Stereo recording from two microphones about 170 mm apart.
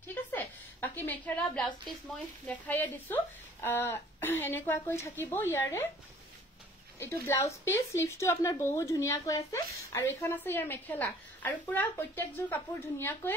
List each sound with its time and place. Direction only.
0.1 s a woman's voice: 10° left (ahead or behind)
7.0 s speech: 15° left (ahead or behind)